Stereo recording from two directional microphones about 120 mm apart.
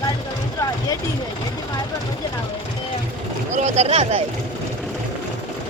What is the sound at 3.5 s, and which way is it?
Speech, 75° right (ahead or behind).